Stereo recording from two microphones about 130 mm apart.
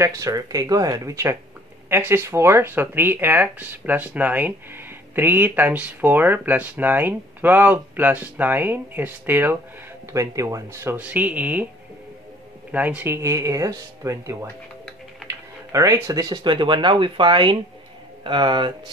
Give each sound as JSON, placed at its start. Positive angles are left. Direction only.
{"t": 0.0, "sound": "speech", "side_deg": -25}
{"t": 12.7, "sound": "speech", "side_deg": -10}